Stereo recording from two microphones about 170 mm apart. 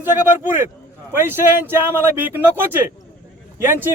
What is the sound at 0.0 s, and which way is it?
A man's voice, 10° right (ahead or behind).